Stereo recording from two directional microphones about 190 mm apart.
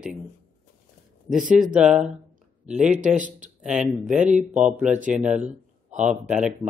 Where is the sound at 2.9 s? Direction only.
40° right (ahead or behind).